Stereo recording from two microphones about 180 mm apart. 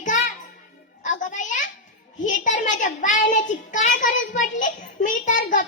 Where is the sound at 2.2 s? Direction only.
45° left (ahead or behind).